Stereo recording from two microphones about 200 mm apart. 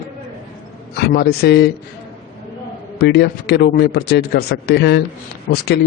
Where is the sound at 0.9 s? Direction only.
55° left (ahead or behind).